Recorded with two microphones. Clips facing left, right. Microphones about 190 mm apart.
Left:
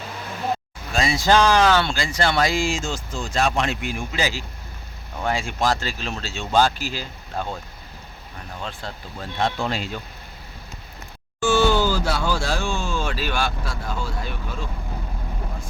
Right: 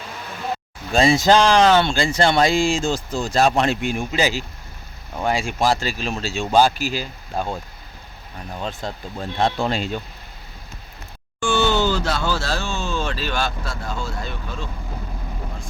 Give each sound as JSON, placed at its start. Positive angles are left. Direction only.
{"t": 0.9, "sound": "speech", "side_deg": -25}
{"t": 8.8, "sound": "speech", "side_deg": -15}
{"t": 9.4, "sound": "speech", "side_deg": -30}
{"t": 11.3, "sound": "speech", "side_deg": 5}